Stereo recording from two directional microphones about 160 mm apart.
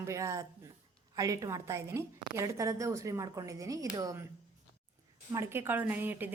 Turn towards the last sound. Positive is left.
turn(degrees=-10)  # may be behind; listen again after turning